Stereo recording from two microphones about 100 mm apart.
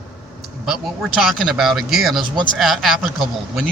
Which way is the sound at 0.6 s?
5° right (ahead or behind).